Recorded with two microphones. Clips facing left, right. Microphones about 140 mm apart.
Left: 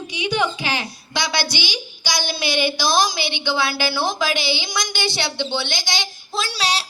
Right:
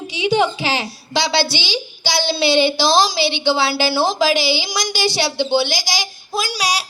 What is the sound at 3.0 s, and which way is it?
Speech, 20° left (ahead or behind).